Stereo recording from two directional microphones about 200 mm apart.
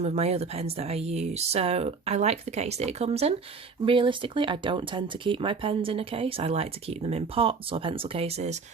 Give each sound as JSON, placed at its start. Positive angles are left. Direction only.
{"t": 0.0, "sound": "speech", "side_deg": -30}